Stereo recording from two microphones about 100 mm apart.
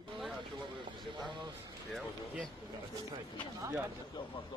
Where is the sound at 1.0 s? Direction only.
55° right (ahead or behind).